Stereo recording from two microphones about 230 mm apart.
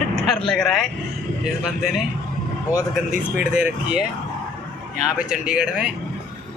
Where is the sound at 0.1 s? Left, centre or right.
Centre.